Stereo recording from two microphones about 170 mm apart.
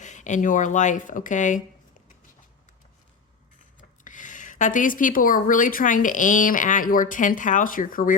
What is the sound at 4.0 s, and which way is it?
A woman's voice, 50° left (ahead or behind).